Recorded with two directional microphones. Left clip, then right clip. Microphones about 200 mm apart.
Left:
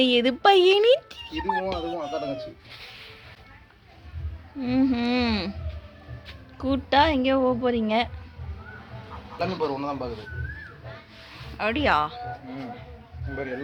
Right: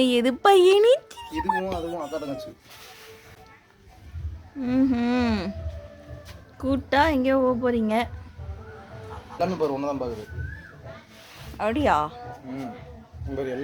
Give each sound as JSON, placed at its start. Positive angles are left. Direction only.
{"t": 0.0, "sound": "speech", "side_deg": -15}
{"t": 4.6, "sound": "speech", "side_deg": -10}
{"t": 6.6, "sound": "speech", "side_deg": -10}
{"t": 9.4, "sound": "speech", "side_deg": -30}
{"t": 11.5, "sound": "speech", "side_deg": -5}